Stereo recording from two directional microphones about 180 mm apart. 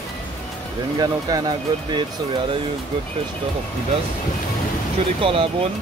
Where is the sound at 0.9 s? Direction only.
20° right (ahead or behind).